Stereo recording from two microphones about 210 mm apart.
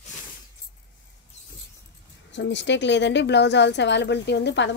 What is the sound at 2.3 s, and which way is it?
A woman's voice, 60° left (ahead or behind).